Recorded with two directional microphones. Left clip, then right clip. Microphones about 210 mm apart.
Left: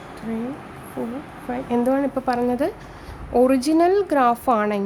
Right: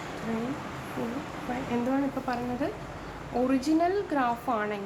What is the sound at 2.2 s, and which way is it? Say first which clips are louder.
A woman's voice: left 10 dB; 50° left (ahead or behind).